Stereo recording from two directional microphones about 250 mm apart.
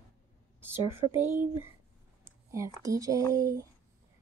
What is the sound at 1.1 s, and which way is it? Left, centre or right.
Speech, centre.